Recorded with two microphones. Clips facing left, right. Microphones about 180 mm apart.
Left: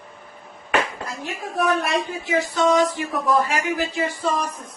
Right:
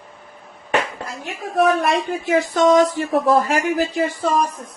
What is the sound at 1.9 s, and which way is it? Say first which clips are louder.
Speech: right 5 dB; 50° right (ahead or behind).